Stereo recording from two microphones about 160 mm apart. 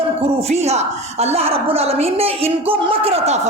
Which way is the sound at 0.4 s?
40° right (ahead or behind).